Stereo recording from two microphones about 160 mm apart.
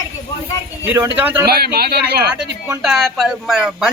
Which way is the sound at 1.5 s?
80° right.